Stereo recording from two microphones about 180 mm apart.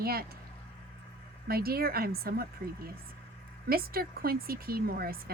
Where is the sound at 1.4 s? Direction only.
55° right (ahead or behind).